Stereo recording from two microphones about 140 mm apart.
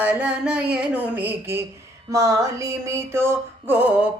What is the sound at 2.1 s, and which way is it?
Music, 25° right (ahead or behind).